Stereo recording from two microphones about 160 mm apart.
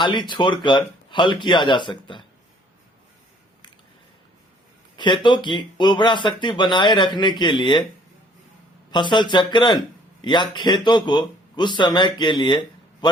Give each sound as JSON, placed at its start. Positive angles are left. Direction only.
{"t": 0.0, "sound": "speech", "side_deg": 30}
{"t": 4.9, "sound": "speech", "side_deg": 30}
{"t": 8.9, "sound": "a man's voice", "side_deg": 30}